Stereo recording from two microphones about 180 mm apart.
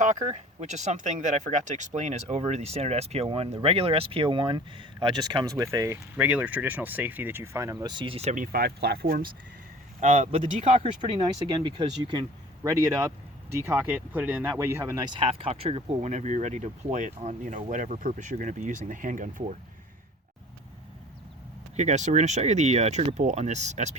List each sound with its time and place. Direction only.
0.0 s speech: 45° right (ahead or behind)
8.5 s speech: 60° right (ahead or behind)
10.0 s speech: 40° right (ahead or behind); by 15.0 s 10° right (ahead or behind)
15.0 s speech: 25° right (ahead or behind); by 19.5 s 45° right (ahead or behind)
21.8 s speech: 40° right (ahead or behind)